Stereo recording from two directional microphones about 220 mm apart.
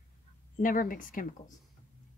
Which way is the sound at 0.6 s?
40° left (ahead or behind).